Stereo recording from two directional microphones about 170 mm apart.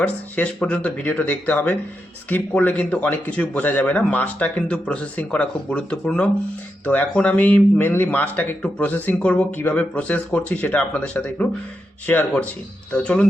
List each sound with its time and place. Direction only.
0.0 s speech: 5° left (ahead or behind)